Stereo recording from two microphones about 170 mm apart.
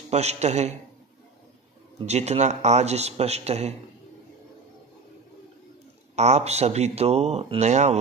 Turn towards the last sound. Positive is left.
turn(degrees=-40)  # may be behind; listen again after turning